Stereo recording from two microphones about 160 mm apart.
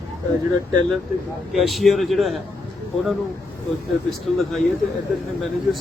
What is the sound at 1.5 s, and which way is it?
Speech, centre (ahead or behind).